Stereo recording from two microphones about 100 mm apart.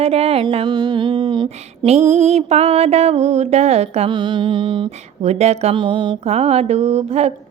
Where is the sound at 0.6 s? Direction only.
45° right (ahead or behind).